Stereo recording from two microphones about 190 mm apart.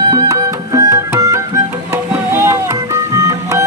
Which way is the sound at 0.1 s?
20° right (ahead or behind).